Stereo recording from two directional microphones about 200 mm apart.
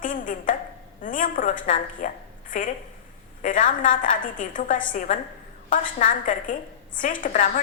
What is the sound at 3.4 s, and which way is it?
A woman's voice, 40° left (ahead or behind).